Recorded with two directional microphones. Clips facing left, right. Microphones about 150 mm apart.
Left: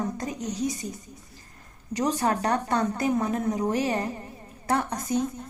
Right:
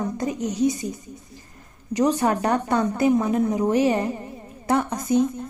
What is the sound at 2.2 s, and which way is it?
A woman's voice, 25° right (ahead or behind).